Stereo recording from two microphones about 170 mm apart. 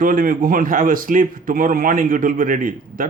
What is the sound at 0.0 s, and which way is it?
A man's voice, 55° right (ahead or behind).